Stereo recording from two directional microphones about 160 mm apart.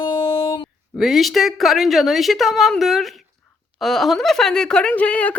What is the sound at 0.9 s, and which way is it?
A woman's voice, centre (ahead or behind).